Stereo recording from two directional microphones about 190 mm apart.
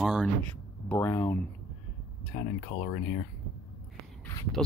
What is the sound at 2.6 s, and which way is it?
Speech, 30° left (ahead or behind).